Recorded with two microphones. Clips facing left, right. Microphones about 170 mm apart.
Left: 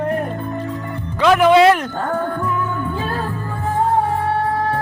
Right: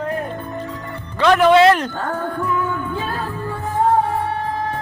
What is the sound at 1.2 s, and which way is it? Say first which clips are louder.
Speech: even; 5° left (ahead or behind).